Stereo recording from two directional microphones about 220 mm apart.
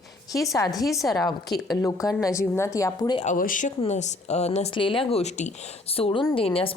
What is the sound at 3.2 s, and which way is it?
Speech, 35° left (ahead or behind).